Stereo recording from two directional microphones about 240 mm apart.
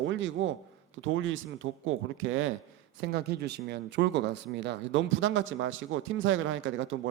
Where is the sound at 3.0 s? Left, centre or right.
Right.